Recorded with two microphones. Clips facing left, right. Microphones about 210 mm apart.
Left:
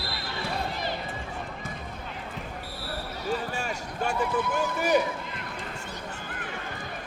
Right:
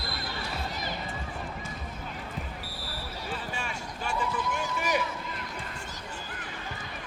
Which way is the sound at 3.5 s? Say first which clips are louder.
Left 4 dB; 40° left (ahead or behind).